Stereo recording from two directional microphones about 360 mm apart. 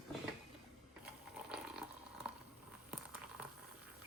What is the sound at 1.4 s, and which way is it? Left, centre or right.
Water, centre.